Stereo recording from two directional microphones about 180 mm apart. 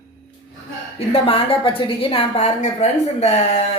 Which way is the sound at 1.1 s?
35° left (ahead or behind).